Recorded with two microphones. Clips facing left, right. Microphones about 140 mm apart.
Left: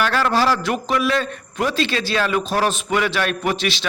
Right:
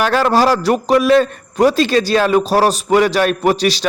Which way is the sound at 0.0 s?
40° right (ahead or behind).